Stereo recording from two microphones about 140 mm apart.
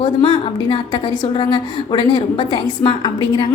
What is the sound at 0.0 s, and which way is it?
A woman's voice, 35° left (ahead or behind).